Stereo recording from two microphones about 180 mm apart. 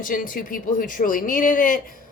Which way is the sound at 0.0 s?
50° left (ahead or behind).